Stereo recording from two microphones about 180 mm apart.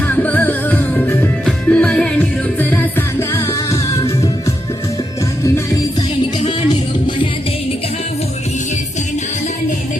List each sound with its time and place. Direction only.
0.2 s music: 10° left (ahead or behind)